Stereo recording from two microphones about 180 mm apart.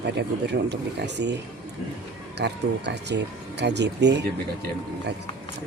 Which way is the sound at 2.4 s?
70° right (ahead or behind).